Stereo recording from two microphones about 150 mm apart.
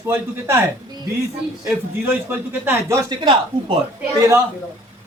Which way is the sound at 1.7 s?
10° right (ahead or behind).